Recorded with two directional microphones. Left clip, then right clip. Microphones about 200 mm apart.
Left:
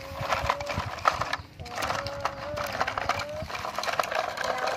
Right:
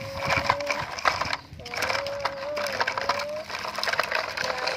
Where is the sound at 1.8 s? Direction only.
25° right (ahead or behind).